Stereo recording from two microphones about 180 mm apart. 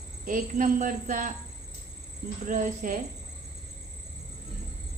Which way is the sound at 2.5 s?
45° right (ahead or behind).